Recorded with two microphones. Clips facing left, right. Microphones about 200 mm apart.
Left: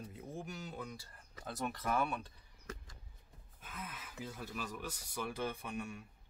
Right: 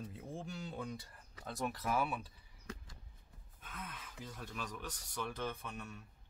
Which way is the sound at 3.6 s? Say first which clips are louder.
Left 1 dB; 5° left (ahead or behind).